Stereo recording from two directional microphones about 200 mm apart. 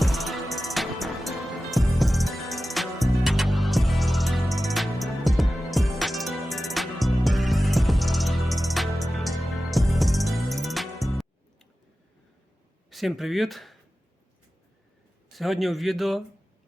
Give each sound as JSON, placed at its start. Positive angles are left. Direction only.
{"t": 0.0, "sound": "music", "side_deg": 0}
{"t": 12.9, "sound": "speech", "side_deg": 0}
{"t": 15.3, "sound": "a man's voice", "side_deg": 0}